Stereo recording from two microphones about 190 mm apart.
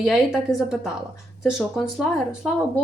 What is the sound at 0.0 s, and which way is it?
Speech, centre (ahead or behind).